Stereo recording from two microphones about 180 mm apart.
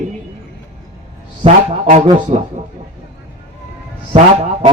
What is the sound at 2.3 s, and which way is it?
Speech, 40° right (ahead or behind).